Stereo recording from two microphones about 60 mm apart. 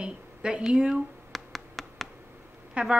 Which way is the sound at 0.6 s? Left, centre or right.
Centre.